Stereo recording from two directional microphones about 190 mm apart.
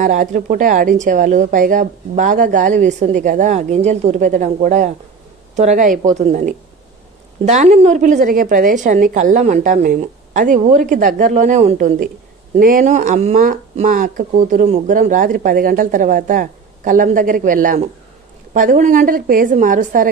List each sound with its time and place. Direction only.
0.0 s a woman's voice: 40° right (ahead or behind)